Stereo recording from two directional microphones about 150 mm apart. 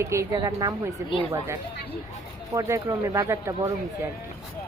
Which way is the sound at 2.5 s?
20° right (ahead or behind).